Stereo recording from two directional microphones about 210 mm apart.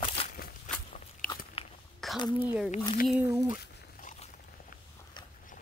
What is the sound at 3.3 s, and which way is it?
Speech, 15° right (ahead or behind).